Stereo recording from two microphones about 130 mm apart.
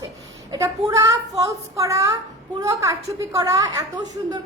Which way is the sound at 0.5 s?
25° right (ahead or behind).